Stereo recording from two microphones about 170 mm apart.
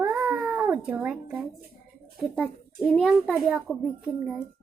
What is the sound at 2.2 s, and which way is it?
A child's voice, 5° left (ahead or behind).